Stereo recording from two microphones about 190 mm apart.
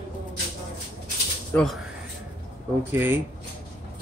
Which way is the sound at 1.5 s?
5° left (ahead or behind).